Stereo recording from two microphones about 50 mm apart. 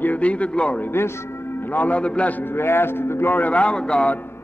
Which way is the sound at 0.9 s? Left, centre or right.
Left.